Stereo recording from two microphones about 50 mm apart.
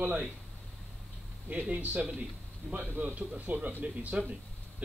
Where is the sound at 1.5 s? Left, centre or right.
Right.